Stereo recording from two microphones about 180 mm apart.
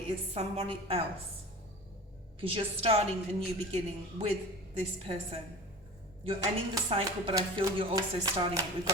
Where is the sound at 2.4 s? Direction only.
30° right (ahead or behind).